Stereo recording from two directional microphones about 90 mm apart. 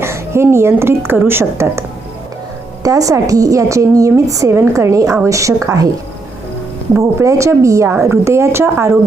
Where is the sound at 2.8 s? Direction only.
40° right (ahead or behind).